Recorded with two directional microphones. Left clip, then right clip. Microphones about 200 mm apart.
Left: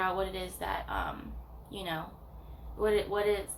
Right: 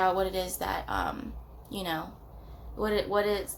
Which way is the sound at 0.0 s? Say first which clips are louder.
Right 5 dB; 45° right (ahead or behind).